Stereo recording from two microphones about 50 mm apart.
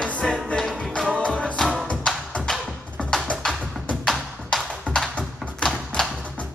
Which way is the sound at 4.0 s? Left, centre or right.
Centre.